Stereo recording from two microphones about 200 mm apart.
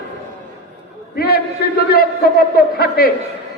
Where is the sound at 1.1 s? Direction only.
50° left (ahead or behind).